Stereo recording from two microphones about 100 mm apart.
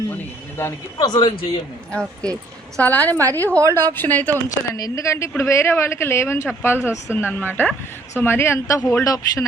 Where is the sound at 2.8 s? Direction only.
15° left (ahead or behind).